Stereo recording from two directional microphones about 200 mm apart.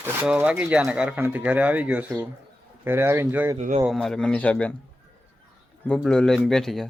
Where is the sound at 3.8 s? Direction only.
Centre (ahead or behind).